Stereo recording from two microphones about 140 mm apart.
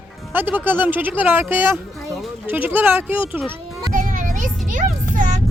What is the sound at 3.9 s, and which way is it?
Music, 70° right (ahead or behind).